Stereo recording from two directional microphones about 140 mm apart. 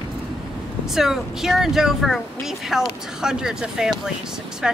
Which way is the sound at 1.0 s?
Centre (ahead or behind).